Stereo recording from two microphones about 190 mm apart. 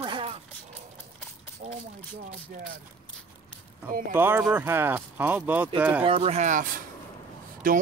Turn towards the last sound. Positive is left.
turn(degrees=-45)  # may be behind; listen again after turning